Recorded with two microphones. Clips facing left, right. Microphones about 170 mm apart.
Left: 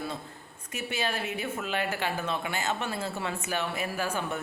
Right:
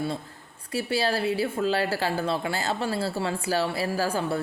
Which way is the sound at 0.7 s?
35° right (ahead or behind).